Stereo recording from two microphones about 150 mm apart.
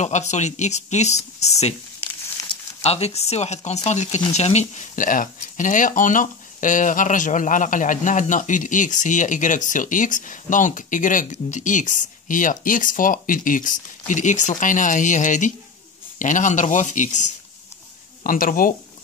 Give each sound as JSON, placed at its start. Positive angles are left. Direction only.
{"t": 0.0, "sound": "speech", "side_deg": 50}
{"t": 18.2, "sound": "speech", "side_deg": 65}